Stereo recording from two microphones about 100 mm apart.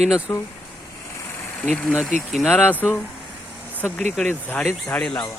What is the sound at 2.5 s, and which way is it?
Speech, 15° left (ahead or behind).